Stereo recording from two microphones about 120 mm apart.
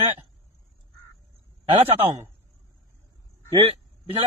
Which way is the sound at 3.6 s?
50° right (ahead or behind).